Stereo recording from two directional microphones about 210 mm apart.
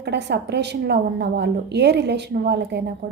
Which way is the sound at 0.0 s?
55° right (ahead or behind).